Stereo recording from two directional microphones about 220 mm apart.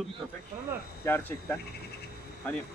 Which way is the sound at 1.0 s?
10° left (ahead or behind).